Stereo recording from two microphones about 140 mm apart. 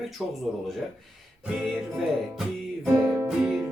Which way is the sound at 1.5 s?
Centre (ahead or behind).